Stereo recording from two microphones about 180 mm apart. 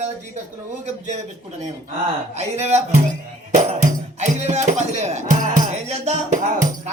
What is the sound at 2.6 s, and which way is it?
Speech, 40° right (ahead or behind).